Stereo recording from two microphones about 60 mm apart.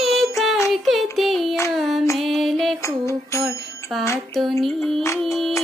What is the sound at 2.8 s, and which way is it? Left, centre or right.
Music, left.